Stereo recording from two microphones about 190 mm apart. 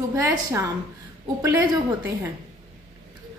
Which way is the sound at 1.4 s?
15° right (ahead or behind).